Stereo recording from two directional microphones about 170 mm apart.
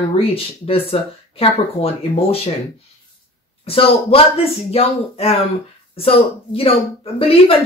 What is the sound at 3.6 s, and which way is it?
Speech, 35° left (ahead or behind).